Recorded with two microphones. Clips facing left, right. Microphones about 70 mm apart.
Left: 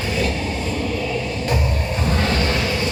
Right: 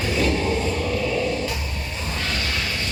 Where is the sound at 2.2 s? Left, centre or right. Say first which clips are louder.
Left 4 dB; left.